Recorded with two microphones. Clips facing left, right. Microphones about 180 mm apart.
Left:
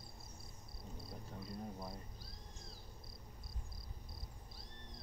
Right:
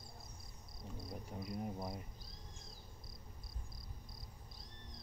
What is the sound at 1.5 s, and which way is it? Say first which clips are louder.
Cricket: right 4 dB; 20° right (ahead or behind).